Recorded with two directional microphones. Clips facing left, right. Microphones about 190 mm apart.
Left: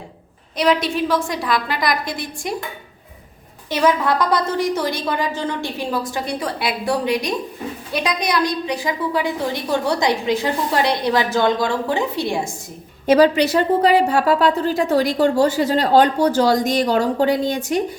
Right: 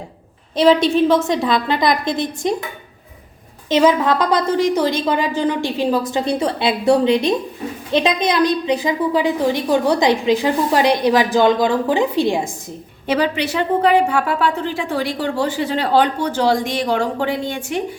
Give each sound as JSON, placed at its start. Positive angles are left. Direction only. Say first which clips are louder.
{"t": 0.5, "sound": "a woman's voice", "louder": "right 5 dB", "side_deg": -25}
{"t": 3.7, "sound": "a woman's voice", "louder": "right 3 dB", "side_deg": -20}
{"t": 13.1, "sound": "speech", "louder": "left 5 dB", "side_deg": 40}